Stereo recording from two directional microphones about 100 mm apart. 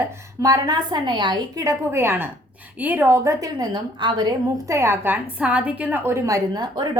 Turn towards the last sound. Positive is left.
turn(degrees=-45)  # may be behind; listen again after turning